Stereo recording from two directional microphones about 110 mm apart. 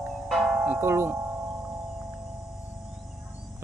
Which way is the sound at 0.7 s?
25° right (ahead or behind).